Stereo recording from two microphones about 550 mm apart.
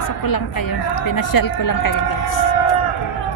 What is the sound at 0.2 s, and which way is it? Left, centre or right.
A woman's voice, left.